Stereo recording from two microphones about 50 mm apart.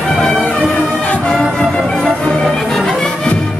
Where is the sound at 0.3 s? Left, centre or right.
Left.